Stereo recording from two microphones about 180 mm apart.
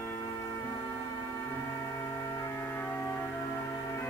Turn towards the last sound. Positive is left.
turn(degrees=10)  # may be behind; listen again after turning